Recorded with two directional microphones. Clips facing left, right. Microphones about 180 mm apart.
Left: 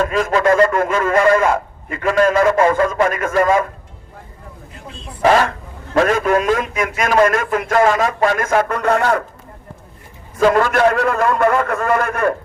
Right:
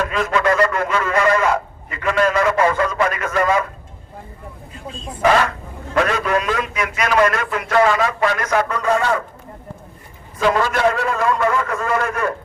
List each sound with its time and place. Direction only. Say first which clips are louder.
0.1 s a sound: left 3 dB; 40° left (ahead or behind)
0.7 s a man's voice: left 4 dB; 45° left (ahead or behind)
5.9 s a man's voice: left 4 dB; 40° left (ahead or behind); by 9.2 s 60° left (ahead or behind)
10.3 s a man's voice: left 4 dB; 50° left (ahead or behind)